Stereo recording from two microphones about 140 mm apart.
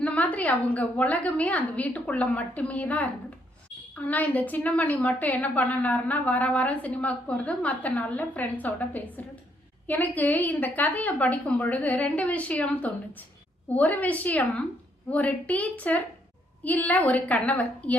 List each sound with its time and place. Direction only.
0.0 s a woman's voice: 10° left (ahead or behind)